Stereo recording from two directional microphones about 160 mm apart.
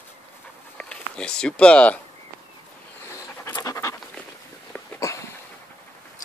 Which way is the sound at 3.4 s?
20° left (ahead or behind).